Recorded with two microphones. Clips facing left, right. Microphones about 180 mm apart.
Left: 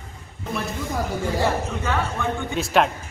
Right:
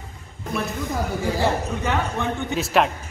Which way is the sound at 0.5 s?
Centre (ahead or behind).